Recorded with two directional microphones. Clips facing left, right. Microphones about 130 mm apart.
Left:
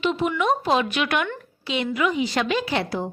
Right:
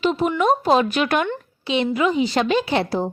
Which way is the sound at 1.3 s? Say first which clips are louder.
Right 5 dB; 25° right (ahead or behind).